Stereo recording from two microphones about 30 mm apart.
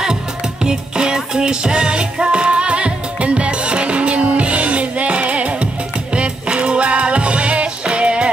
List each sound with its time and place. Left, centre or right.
0.0 s music: right